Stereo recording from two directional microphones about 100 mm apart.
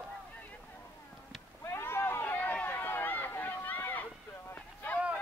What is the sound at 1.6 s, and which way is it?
Run, 25° left (ahead or behind).